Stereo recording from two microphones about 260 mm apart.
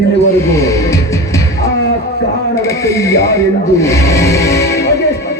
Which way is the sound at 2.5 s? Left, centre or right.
Centre.